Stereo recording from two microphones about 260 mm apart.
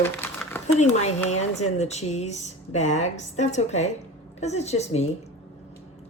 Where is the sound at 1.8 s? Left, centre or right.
Left.